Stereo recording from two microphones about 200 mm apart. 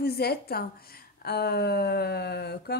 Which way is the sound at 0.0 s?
50° left (ahead or behind).